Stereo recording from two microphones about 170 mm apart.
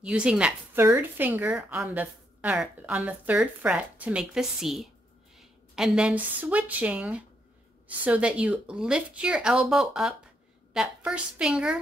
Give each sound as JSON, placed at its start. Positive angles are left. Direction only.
{"t": 0.0, "sound": "a woman's voice", "side_deg": -5}